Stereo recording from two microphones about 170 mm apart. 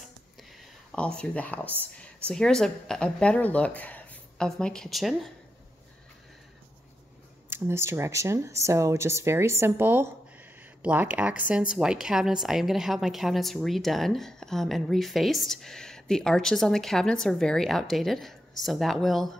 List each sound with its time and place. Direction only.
0.4 s a sound: 5° left (ahead or behind)
1.7 s speech: 10° right (ahead or behind)
2.2 s a woman's voice: 5° left (ahead or behind)
7.4 s a woman's voice: 15° right (ahead or behind); by 19.3 s centre (ahead or behind)